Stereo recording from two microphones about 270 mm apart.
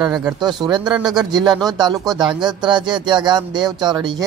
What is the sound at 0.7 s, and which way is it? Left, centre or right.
Speech, centre.